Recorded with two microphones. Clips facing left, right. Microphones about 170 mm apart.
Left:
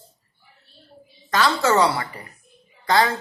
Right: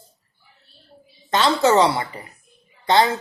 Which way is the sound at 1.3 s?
20° right (ahead or behind).